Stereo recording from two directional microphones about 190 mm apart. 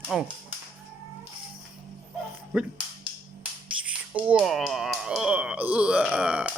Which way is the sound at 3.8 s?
5° right (ahead or behind).